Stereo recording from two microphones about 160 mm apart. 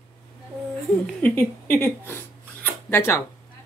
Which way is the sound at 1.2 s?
15° left (ahead or behind).